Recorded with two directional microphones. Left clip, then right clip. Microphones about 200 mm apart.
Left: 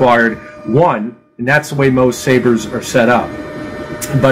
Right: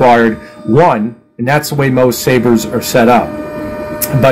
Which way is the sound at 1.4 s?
50° right (ahead or behind).